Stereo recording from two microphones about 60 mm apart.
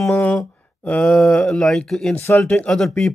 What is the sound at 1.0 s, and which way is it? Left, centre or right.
Speech, centre.